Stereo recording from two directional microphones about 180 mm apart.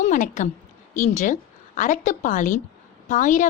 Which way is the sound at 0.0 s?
40° left (ahead or behind).